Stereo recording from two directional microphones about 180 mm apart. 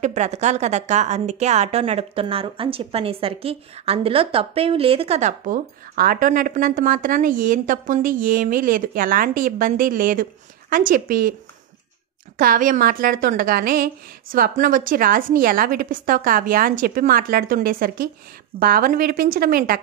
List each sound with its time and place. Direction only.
0.0 s a woman's voice: 40° right (ahead or behind)
12.4 s a woman's voice: 50° right (ahead or behind)